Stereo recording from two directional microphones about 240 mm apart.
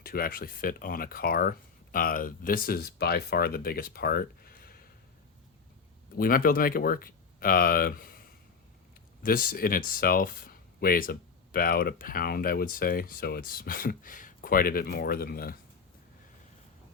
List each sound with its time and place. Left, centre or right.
0.0 s speech: left
6.1 s speech: left
9.2 s speech: left